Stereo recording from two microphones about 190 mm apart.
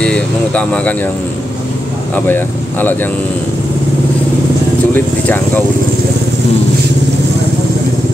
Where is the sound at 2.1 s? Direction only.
10° left (ahead or behind).